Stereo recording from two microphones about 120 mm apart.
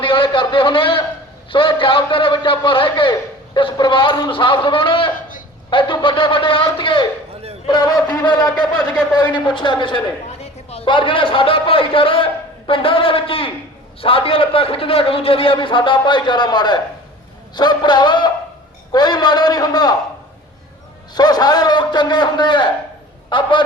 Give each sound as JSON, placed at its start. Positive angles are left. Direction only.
{"t": 0.0, "sound": "a man's voice", "side_deg": 45}
{"t": 21.2, "sound": "a man's voice", "side_deg": 35}